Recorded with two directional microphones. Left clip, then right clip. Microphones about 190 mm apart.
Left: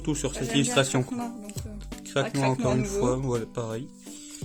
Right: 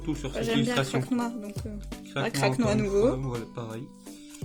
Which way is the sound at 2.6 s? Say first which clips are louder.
Right 2 dB; 50° right (ahead or behind).